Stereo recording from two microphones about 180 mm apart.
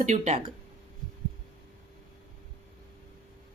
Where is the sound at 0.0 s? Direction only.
40° right (ahead or behind).